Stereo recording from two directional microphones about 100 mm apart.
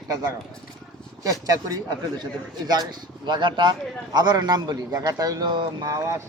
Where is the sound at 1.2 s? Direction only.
35° right (ahead or behind); by 5.9 s 50° right (ahead or behind).